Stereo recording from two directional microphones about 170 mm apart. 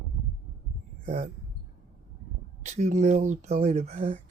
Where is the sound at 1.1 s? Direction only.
40° right (ahead or behind).